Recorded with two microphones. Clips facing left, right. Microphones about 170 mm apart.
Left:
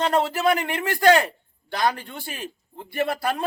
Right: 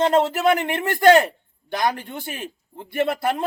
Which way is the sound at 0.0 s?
20° right (ahead or behind).